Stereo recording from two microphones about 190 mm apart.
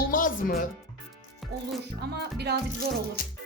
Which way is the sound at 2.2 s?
60° right (ahead or behind).